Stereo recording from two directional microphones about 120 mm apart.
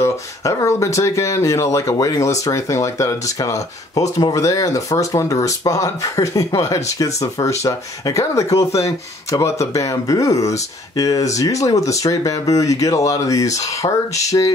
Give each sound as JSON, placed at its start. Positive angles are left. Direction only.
{"t": 0.0, "sound": "speech", "side_deg": 25}